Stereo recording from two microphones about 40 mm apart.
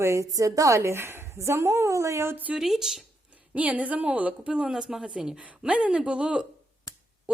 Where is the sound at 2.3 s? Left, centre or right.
Right.